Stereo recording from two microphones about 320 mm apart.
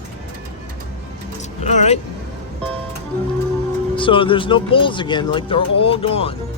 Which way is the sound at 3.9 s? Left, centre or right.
Centre.